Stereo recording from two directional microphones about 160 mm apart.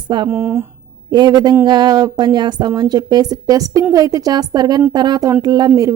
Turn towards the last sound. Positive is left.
turn(degrees=-20)  # may be behind; listen again after turning